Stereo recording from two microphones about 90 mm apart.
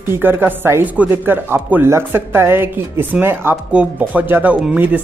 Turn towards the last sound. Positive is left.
turn(degrees=-20)  # may be behind; listen again after turning